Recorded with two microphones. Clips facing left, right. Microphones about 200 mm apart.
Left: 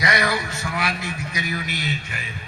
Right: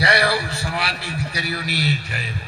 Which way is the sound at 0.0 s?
35° right (ahead or behind).